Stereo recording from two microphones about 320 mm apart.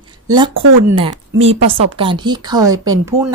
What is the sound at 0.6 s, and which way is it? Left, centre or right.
Speech, right.